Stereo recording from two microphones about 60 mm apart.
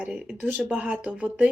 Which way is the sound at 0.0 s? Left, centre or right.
Right.